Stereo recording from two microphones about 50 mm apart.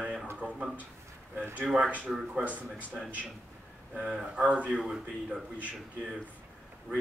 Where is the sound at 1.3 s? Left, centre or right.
Right.